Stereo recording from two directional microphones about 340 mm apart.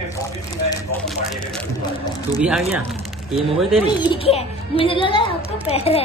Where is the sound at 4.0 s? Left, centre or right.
Centre.